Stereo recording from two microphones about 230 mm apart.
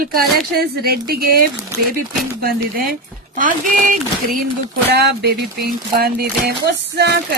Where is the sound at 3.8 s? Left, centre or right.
Right.